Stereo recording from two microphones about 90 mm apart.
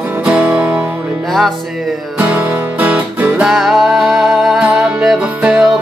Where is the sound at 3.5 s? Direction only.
5° right (ahead or behind).